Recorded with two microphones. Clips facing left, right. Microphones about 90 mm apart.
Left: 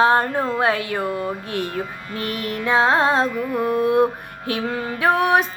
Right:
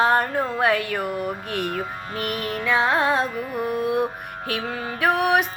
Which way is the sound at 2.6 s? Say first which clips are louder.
Left 3 dB; 25° left (ahead or behind).